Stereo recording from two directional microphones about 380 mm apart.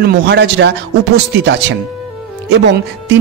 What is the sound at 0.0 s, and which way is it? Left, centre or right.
Speech, right.